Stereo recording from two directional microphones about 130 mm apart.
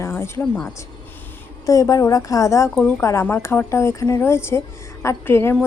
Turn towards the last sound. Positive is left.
turn(degrees=20)  # may be behind; listen again after turning